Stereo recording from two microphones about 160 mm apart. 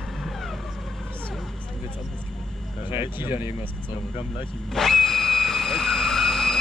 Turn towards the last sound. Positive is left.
turn(degrees=0)  # may be behind; listen again after turning